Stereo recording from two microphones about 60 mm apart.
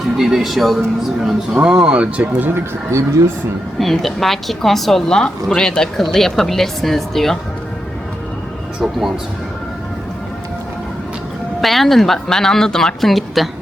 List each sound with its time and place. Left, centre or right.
0.2 s a woman's voice: centre
1.6 s speech: centre
2.6 s speech: right
3.8 s a woman's voice: centre
8.8 s a woman's voice: centre
11.6 s a woman's voice: centre